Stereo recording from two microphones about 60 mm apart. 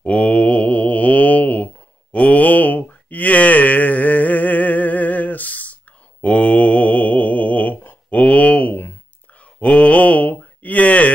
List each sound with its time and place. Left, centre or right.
0.0 s mantra: left
8.2 s a sound: left
9.6 s mantra: left